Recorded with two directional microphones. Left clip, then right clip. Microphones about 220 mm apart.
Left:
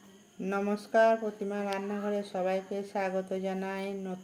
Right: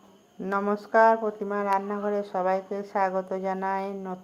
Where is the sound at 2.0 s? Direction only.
35° right (ahead or behind).